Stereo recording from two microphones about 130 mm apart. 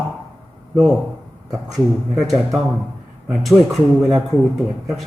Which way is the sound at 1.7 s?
Centre (ahead or behind).